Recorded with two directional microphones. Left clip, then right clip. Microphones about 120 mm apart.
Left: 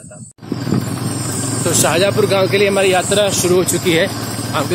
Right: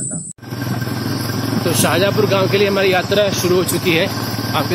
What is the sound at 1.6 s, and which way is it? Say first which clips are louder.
Speech: left 2 dB; 20° left (ahead or behind).